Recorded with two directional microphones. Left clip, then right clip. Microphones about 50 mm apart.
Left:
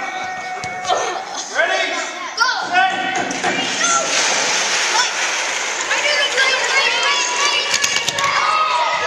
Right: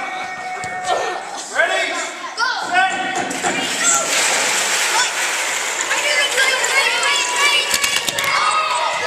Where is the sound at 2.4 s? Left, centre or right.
Left.